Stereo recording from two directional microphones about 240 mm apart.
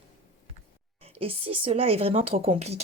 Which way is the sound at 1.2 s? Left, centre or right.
Right.